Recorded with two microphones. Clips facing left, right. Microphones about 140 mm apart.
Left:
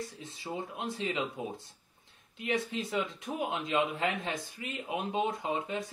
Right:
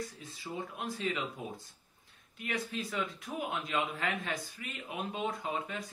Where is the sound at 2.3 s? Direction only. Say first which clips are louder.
Left 4 dB; 25° left (ahead or behind).